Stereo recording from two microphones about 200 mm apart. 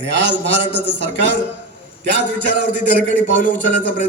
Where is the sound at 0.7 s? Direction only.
60° right (ahead or behind).